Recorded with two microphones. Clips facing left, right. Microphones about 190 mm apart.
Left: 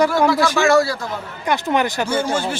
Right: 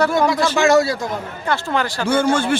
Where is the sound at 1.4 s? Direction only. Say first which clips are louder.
Left 3 dB; 20° left (ahead or behind).